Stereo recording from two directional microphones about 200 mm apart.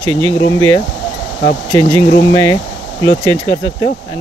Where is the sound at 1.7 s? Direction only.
10° left (ahead or behind).